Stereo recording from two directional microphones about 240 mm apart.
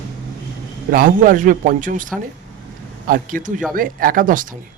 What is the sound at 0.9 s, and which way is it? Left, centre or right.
A man's voice, right.